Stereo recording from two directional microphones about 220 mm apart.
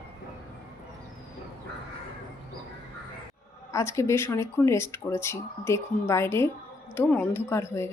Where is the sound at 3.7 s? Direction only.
15° left (ahead or behind).